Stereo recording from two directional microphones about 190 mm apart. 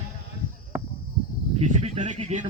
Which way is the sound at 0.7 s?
10° right (ahead or behind).